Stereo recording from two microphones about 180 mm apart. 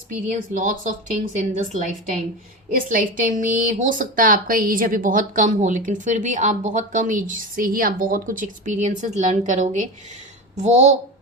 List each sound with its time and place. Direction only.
0.1 s a woman's voice: 45° right (ahead or behind)
2.6 s a woman's voice: 50° right (ahead or behind)